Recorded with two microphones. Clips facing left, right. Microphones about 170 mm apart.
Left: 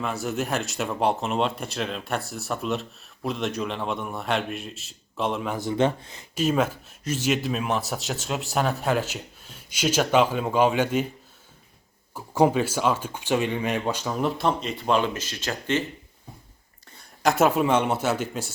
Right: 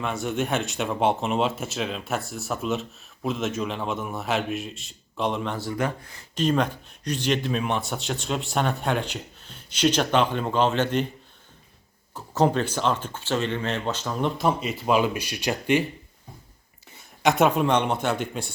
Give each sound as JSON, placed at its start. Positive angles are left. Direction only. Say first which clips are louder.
{"t": 0.0, "sound": "speech", "louder": "right 1 dB", "side_deg": 0}
{"t": 5.5, "sound": "speech", "louder": "left 4 dB", "side_deg": 20}
{"t": 6.3, "sound": "speech", "louder": "even", "side_deg": 5}
{"t": 12.1, "sound": "speech", "louder": "left 2 dB", "side_deg": 10}
{"t": 16.9, "sound": "speech", "louder": "right 1 dB", "side_deg": 0}